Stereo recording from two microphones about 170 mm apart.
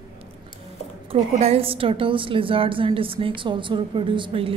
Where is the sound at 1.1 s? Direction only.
35° right (ahead or behind).